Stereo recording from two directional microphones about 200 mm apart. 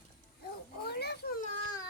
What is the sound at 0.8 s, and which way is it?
Children playing, 55° left (ahead or behind).